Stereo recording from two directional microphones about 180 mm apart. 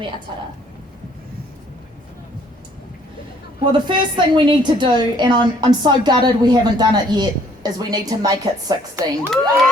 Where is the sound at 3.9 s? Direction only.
25° right (ahead or behind).